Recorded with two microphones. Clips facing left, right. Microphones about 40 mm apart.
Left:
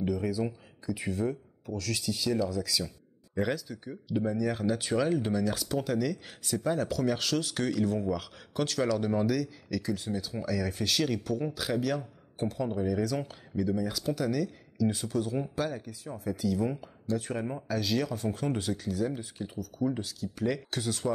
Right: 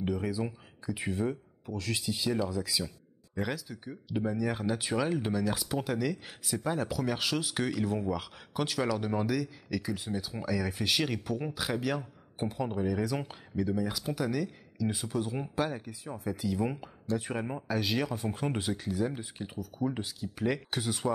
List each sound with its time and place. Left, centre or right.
0.0 s speech: centre
3.3 s speech: centre